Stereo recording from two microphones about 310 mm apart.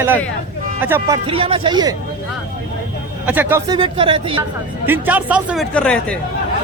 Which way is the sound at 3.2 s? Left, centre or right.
Centre.